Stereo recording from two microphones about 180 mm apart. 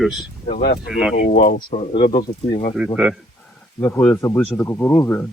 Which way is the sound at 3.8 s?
15° left (ahead or behind).